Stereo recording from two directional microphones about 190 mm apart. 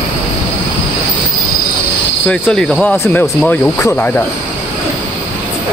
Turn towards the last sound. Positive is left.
turn(degrees=10)  # may be behind; listen again after turning